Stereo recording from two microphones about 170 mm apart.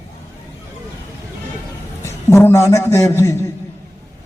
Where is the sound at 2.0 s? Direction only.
15° left (ahead or behind).